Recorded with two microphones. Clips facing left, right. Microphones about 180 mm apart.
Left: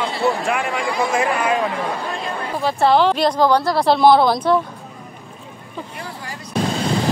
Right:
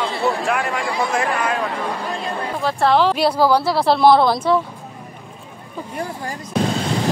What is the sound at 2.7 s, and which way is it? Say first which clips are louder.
A woman's voice: left 1 dB; centre (ahead or behind).